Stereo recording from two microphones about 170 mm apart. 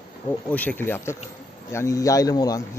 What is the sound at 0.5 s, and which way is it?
A man's voice, 10° left (ahead or behind).